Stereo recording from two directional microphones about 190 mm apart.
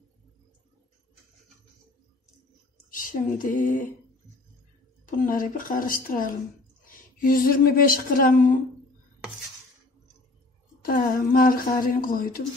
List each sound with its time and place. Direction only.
2.9 s female singing: 45° left (ahead or behind)
5.0 s a woman's voice: 45° left (ahead or behind)
10.8 s a woman's voice: 50° left (ahead or behind)